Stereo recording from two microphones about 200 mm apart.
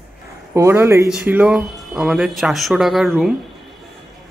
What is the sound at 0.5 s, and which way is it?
Speech, 10° right (ahead or behind).